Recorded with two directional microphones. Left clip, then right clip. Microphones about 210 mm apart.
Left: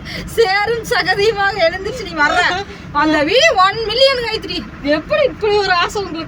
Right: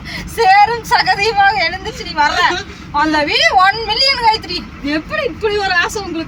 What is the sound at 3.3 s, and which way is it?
A woman's voice, centre (ahead or behind).